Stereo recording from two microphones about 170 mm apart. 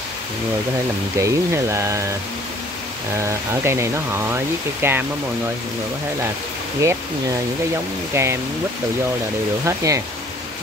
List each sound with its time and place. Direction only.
1.2 s speech: 15° right (ahead or behind)
3.2 s speech: 15° right (ahead or behind)
6.8 s speech: 15° right (ahead or behind)
9.7 s speech: 15° right (ahead or behind)